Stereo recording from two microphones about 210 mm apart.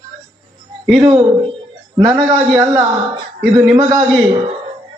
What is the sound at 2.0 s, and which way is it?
Speech, 15° right (ahead or behind).